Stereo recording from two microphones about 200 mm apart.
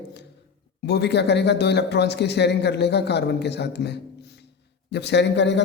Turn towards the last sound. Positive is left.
turn(degrees=60)  # may be behind; listen again after turning